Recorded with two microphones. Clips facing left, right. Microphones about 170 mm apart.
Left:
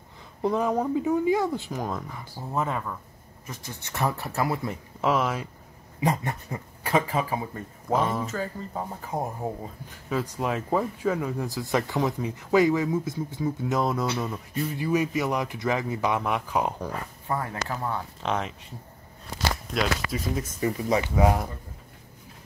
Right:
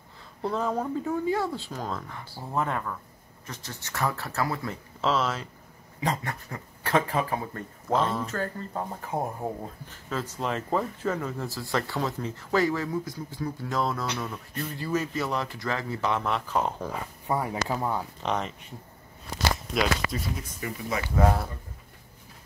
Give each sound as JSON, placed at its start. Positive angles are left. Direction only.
{"t": 0.4, "sound": "speech", "side_deg": 15}
{"t": 6.9, "sound": "speech", "side_deg": 5}
{"t": 14.0, "sound": "speech", "side_deg": 10}
{"t": 16.9, "sound": "speech", "side_deg": -15}
{"t": 18.2, "sound": "speech", "side_deg": 0}
{"t": 19.7, "sound": "speech", "side_deg": 0}
{"t": 20.6, "sound": "speech", "side_deg": 20}